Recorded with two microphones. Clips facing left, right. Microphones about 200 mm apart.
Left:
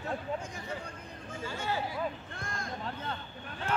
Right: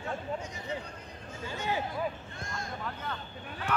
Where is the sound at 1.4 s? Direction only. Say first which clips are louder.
Right 1 dB; 15° right (ahead or behind).